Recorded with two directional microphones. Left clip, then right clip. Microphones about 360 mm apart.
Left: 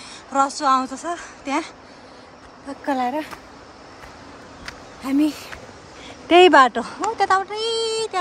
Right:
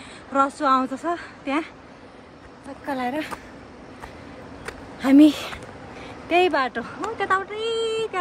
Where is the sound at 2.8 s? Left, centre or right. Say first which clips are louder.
Left 4 dB; centre.